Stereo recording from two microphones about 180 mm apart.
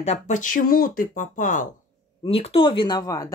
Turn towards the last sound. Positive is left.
turn(degrees=20)  # may be behind; listen again after turning